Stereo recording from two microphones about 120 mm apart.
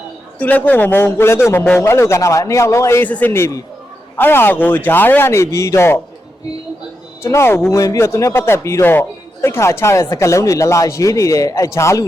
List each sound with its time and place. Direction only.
0.3 s speech: 15° left (ahead or behind)
7.2 s speech: 20° left (ahead or behind)